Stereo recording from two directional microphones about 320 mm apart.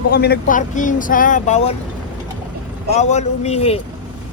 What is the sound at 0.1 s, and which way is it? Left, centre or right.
Speech, left.